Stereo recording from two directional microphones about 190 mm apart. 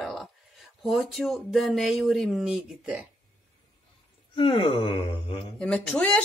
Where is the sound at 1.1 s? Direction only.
Centre (ahead or behind).